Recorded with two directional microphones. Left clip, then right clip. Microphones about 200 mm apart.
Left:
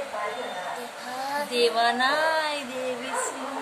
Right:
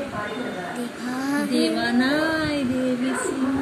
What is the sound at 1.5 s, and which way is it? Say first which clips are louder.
Music: left 3 dB; 55° left (ahead or behind).